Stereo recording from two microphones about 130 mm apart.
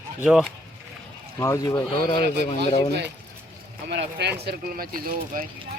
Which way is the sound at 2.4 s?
55° left (ahead or behind).